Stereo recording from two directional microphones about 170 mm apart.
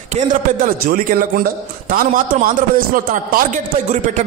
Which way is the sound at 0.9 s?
60° right (ahead or behind).